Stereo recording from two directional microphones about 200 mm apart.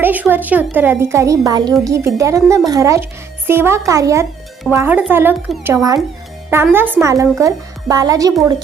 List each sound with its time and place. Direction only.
0.0 s a child's voice: 10° right (ahead or behind)